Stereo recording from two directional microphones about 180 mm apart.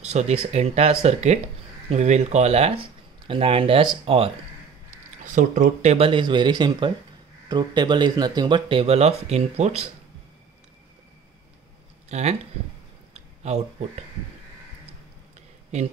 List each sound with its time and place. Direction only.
0.0 s speech: 35° right (ahead or behind)
5.2 s speech: 45° right (ahead or behind)
12.1 s speech: 40° right (ahead or behind)
13.1 s a sound: 35° right (ahead or behind)